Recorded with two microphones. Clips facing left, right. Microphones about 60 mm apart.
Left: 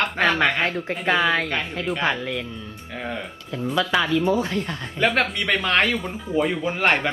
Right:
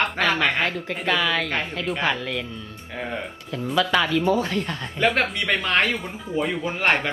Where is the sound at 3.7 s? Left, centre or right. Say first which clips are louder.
Even; centre.